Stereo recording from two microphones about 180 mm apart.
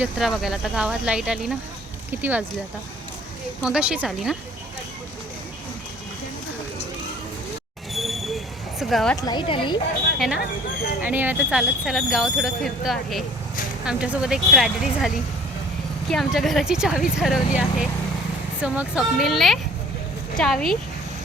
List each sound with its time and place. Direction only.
0.0 s speech: centre (ahead or behind)
3.6 s speech: 5° right (ahead or behind)
7.9 s a sound: centre (ahead or behind)
8.8 s speech: centre (ahead or behind)
9.2 s a woman's voice: 25° left (ahead or behind)
10.2 s speech: centre (ahead or behind)